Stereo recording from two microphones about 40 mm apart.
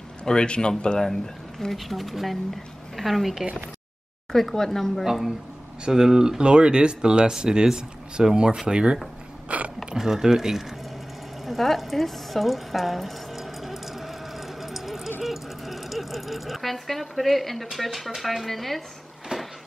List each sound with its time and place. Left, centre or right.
0.2 s a man's voice: left
1.8 s speech: centre
5.0 s speech: centre
9.5 s speech: right
9.9 s speech: centre
11.4 s a sound: centre
15.2 s sewing machine: centre
17.7 s speech: centre
19.3 s a sound: right